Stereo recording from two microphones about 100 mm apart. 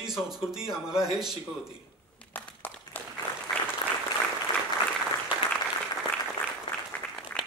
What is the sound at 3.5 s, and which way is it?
Applause, 5° left (ahead or behind).